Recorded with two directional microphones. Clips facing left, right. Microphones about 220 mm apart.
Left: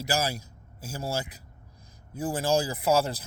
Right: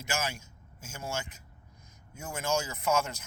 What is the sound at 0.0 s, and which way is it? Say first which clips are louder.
A man's voice: left 6 dB; 35° left (ahead or behind).